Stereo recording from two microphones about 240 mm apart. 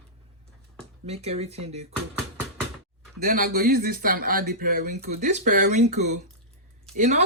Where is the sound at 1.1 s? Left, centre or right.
Right.